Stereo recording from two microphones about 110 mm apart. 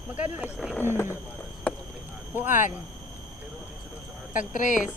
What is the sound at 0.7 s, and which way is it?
Speech, 20° left (ahead or behind).